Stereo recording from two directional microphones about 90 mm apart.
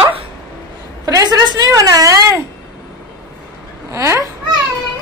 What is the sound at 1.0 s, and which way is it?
A woman's voice, 40° right (ahead or behind).